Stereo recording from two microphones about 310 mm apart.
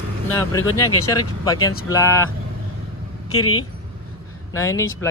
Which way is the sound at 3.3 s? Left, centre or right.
Left.